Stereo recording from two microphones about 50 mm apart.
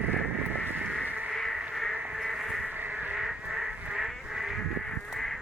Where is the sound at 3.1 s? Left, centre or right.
Centre.